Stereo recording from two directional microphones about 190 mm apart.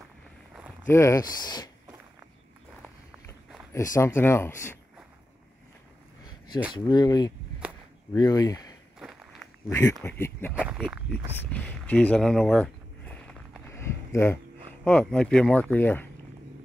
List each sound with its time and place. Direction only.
0.8 s speech: 15° left (ahead or behind)
3.7 s speech: 15° left (ahead or behind)
6.7 s speech: 20° left (ahead or behind)
10.5 s speech: 5° right (ahead or behind)
11.3 s a sound: 5° left (ahead or behind)
14.9 s speech: 5° left (ahead or behind)